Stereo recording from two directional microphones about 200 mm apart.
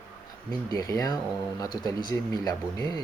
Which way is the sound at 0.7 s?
15° left (ahead or behind).